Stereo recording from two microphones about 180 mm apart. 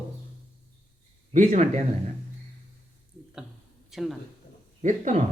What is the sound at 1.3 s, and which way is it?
Speech, 40° right (ahead or behind).